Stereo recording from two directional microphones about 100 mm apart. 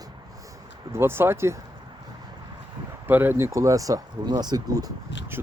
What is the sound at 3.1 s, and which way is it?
Speech, 20° right (ahead or behind).